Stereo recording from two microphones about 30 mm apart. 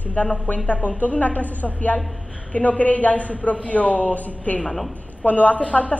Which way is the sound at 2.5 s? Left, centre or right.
Left.